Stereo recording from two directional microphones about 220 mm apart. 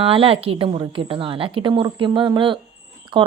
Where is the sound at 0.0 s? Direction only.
25° right (ahead or behind).